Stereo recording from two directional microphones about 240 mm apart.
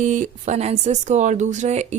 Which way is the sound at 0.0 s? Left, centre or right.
Right.